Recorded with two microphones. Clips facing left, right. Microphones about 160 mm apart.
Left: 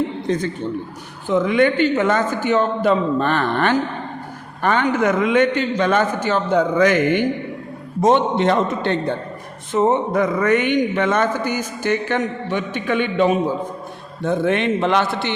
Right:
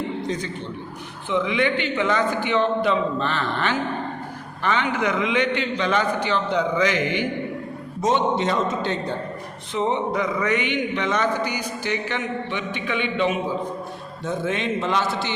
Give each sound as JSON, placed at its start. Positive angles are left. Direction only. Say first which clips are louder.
{"t": 0.3, "sound": "a man's voice", "louder": "left 6 dB", "side_deg": 50}
{"t": 9.7, "sound": "speech", "louder": "left 6 dB", "side_deg": 45}
{"t": 14.3, "sound": "a man's voice", "louder": "left 6 dB", "side_deg": 60}